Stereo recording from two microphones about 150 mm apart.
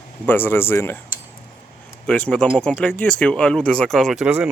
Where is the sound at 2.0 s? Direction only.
10° left (ahead or behind).